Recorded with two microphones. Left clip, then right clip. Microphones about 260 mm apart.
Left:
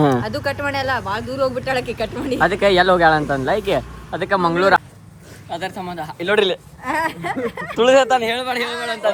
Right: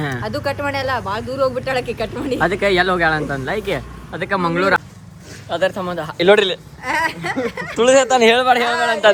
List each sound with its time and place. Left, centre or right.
0.0 s speech: centre
6.3 s speech: centre
7.8 s speech: centre
8.6 s speech: right